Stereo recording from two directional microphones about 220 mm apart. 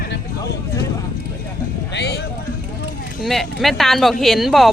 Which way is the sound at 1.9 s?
50° left (ahead or behind).